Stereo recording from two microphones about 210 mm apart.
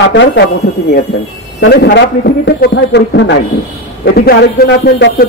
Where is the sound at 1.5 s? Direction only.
50° left (ahead or behind).